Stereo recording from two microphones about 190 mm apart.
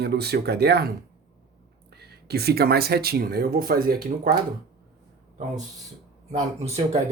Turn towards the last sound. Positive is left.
turn(degrees=-35)  # may be behind; listen again after turning